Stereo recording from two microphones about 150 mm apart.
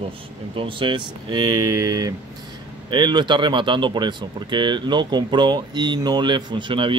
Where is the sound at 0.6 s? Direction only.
35° right (ahead or behind).